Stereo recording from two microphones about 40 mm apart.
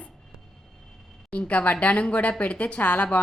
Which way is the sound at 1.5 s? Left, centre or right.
Left.